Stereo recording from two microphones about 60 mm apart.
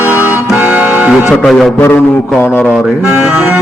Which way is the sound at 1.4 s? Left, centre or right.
Centre.